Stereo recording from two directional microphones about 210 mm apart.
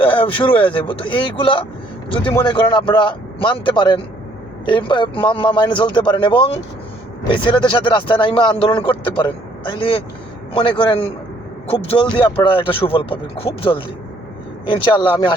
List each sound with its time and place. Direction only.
0.0 s speech: 25° left (ahead or behind)